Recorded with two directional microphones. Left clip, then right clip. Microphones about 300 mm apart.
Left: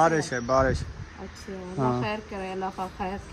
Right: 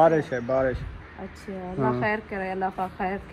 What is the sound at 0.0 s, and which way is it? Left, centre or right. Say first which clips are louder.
Speech: right 3 dB; centre.